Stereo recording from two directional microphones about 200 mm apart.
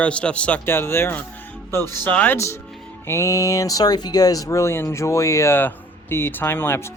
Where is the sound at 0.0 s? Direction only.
5° left (ahead or behind).